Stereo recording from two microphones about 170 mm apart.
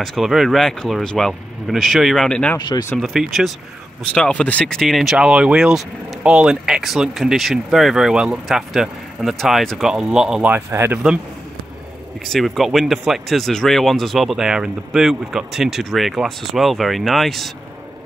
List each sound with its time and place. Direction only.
0.0 s speech: centre (ahead or behind)
2.7 s speech: 15° left (ahead or behind)
3.0 s speech: centre (ahead or behind)
12.3 s speech: centre (ahead or behind)